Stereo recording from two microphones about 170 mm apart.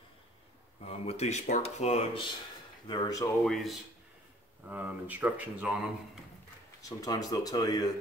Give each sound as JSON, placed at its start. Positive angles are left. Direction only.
{"t": 0.8, "sound": "speech", "side_deg": 40}
{"t": 2.9, "sound": "speech", "side_deg": 25}
{"t": 3.4, "sound": "speech", "side_deg": 0}
{"t": 6.8, "sound": "speech", "side_deg": 20}